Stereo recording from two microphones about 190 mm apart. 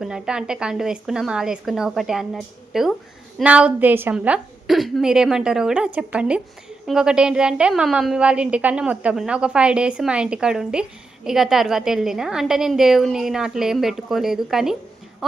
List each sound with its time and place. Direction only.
0.0 s a woman's voice: 5° right (ahead or behind)